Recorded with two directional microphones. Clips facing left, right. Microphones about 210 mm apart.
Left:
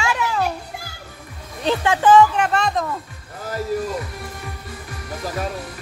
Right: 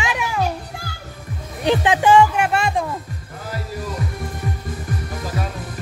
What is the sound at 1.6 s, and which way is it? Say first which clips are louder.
Speech: right 2 dB; 15° right (ahead or behind).